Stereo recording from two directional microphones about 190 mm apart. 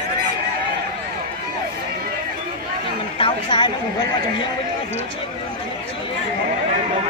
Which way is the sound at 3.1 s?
25° left (ahead or behind).